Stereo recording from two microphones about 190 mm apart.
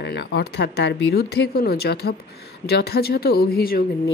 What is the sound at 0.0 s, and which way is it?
Speech, 60° left (ahead or behind).